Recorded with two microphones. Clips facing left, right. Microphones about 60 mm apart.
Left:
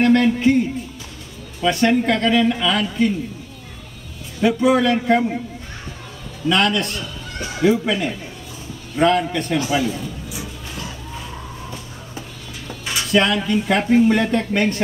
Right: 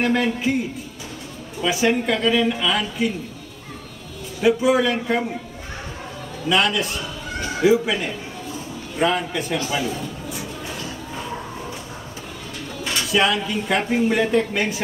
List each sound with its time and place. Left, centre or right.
0.0 s a man's voice: centre
1.6 s speech: centre
4.4 s speech: centre
6.5 s speech: centre
9.0 s speech: centre
12.8 s speech: centre